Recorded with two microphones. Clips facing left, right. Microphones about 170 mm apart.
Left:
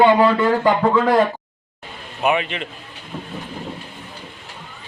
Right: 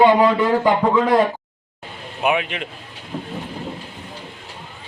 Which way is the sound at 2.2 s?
5° right (ahead or behind).